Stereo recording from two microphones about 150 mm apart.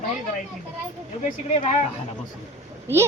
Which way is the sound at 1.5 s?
45° left (ahead or behind).